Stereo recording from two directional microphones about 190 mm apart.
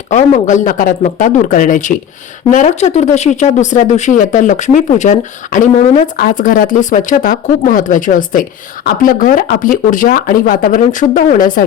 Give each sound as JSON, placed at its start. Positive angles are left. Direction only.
{"t": 0.1, "sound": "speech", "side_deg": 40}